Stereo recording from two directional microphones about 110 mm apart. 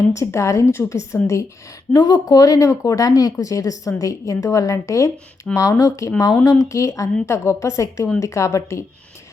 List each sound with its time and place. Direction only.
0.1 s speech: 25° left (ahead or behind)